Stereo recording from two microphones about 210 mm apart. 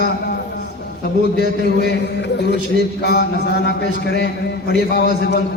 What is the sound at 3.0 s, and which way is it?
A man's voice, 50° left (ahead or behind).